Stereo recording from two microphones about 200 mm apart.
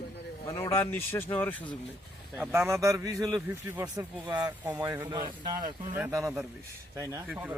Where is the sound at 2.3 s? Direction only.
10° right (ahead or behind).